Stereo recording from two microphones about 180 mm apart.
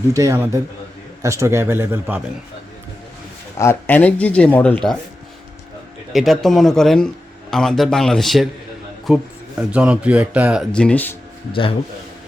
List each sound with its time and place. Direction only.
0.1 s a man's voice: 15° right (ahead or behind)
3.6 s speech: 10° left (ahead or behind)
6.1 s a man's voice: centre (ahead or behind)
10.7 s speech: 5° left (ahead or behind)